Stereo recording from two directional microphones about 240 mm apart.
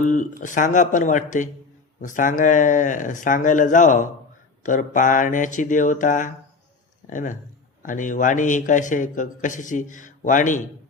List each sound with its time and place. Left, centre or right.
0.0 s a man's voice: left